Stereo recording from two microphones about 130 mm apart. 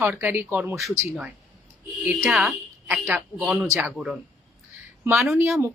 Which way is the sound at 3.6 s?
20° right (ahead or behind).